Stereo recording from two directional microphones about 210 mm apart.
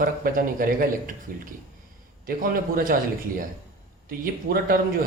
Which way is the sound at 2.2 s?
40° right (ahead or behind).